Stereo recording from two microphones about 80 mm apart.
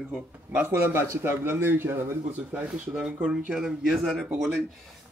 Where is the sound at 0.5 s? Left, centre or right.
Right.